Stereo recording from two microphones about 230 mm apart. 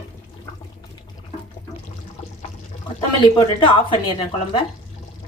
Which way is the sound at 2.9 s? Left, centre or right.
Left.